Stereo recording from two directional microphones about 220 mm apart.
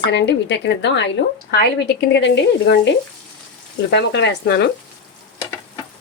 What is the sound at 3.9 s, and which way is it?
Speech, 50° left (ahead or behind).